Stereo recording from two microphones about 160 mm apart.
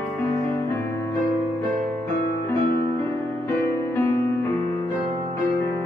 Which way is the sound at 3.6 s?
15° left (ahead or behind).